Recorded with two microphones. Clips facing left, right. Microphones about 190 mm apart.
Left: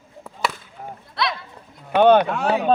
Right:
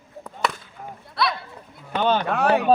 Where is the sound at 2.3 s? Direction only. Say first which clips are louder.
Right 1 dB; 60° right (ahead or behind).